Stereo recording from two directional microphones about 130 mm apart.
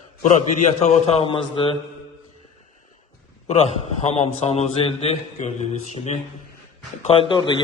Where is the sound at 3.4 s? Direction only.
55° left (ahead or behind).